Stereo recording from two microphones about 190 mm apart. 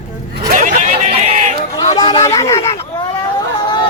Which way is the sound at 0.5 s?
40° right (ahead or behind).